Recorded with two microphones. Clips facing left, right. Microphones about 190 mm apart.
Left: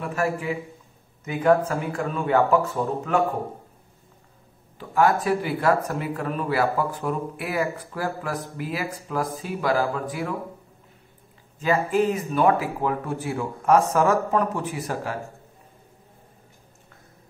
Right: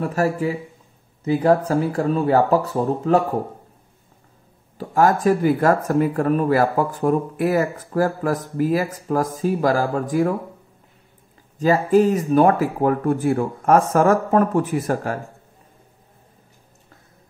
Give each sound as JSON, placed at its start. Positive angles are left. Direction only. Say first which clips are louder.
{"t": 0.0, "sound": "speech", "louder": "right 5 dB", "side_deg": -40}
{"t": 4.7, "sound": "speech", "louder": "right 3 dB", "side_deg": -40}
{"t": 11.5, "sound": "speech", "louder": "right 6 dB", "side_deg": -40}